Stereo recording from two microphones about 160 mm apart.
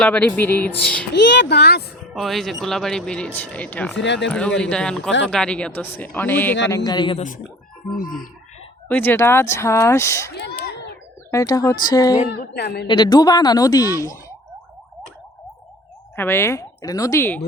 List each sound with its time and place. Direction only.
0.0 s speech: 10° left (ahead or behind)
1.1 s speech: 90° left
2.1 s speech: centre (ahead or behind)
3.9 s speech: 90° left
4.3 s speech: 5° left (ahead or behind); by 7.2 s 25° left (ahead or behind)
7.2 s speech: 55° left (ahead or behind)
8.9 s speech: 15° left (ahead or behind)
10.3 s a sound: 90° left
11.3 s speech: 20° left (ahead or behind)
12.3 s speech: 90° left
12.9 s speech: 25° left (ahead or behind)
16.1 s speech: 15° left (ahead or behind)